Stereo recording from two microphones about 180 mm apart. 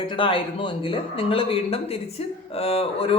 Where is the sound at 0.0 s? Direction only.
30° left (ahead or behind).